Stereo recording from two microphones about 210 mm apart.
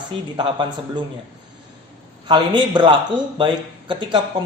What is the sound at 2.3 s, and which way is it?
Speech, 20° right (ahead or behind).